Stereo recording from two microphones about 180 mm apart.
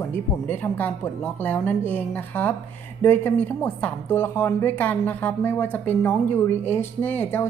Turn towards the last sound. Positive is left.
turn(degrees=10)  # may be behind; listen again after turning